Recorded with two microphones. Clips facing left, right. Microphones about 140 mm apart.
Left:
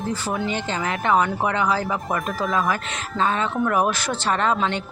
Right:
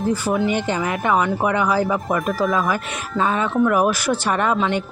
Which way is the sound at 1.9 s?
Centre (ahead or behind).